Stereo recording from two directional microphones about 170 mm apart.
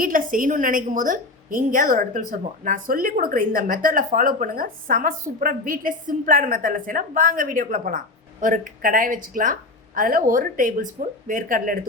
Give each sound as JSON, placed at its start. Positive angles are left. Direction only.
{"t": 0.0, "sound": "a woman's voice", "side_deg": -55}